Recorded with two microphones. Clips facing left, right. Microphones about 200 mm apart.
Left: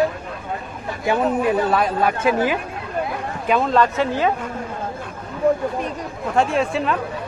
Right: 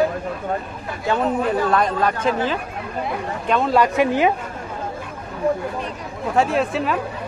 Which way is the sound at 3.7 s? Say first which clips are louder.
Right 1 dB; 15° right (ahead or behind).